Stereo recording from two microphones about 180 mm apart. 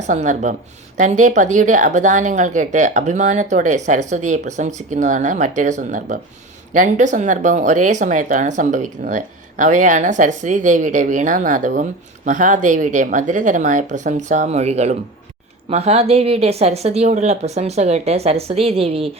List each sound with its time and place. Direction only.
0.0 s a woman's voice: 40° right (ahead or behind)